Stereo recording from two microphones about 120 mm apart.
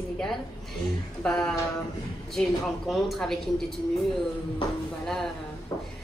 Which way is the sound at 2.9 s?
Centre (ahead or behind).